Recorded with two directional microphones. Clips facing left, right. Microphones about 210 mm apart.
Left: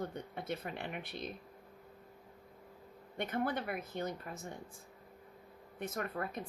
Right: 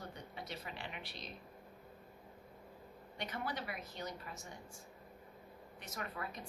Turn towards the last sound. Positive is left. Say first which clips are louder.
# left 6 dB
turn(degrees=50)  # may be behind; listen again after turning